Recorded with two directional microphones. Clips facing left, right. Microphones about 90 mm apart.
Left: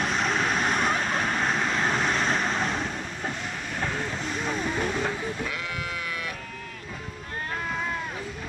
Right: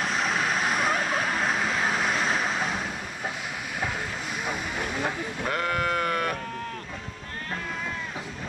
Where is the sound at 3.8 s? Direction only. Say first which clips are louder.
Left 1 dB; 5° right (ahead or behind).